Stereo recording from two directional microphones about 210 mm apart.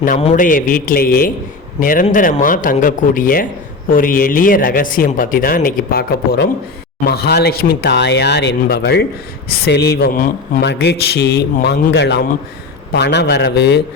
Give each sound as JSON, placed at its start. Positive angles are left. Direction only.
{"t": 0.2, "sound": "speech", "side_deg": 35}